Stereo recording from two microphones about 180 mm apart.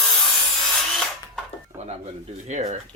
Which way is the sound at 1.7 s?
10° right (ahead or behind).